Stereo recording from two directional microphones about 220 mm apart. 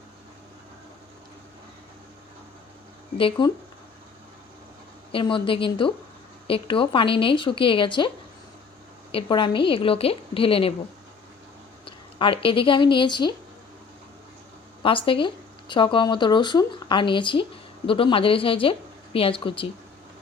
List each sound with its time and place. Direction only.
3.2 s speech: 25° left (ahead or behind)
5.1 s speech: 25° left (ahead or behind)
9.1 s speech: 20° left (ahead or behind)
11.9 s speech: 25° left (ahead or behind)
14.8 s speech: 25° left (ahead or behind)